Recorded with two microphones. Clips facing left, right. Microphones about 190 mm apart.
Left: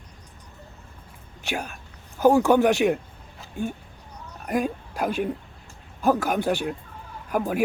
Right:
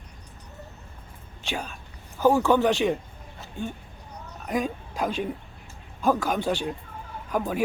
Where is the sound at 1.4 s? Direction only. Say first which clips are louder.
Left 2 dB; 10° left (ahead or behind).